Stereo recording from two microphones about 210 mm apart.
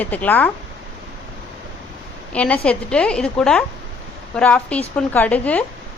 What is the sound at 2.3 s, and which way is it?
A woman's voice, 5° left (ahead or behind).